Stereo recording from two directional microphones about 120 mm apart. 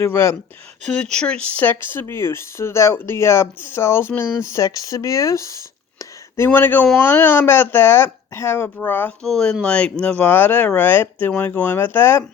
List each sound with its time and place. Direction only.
0.0 s speech: 20° left (ahead or behind)
0.9 s speech: 5° left (ahead or behind)
9.2 s speech: 5° left (ahead or behind)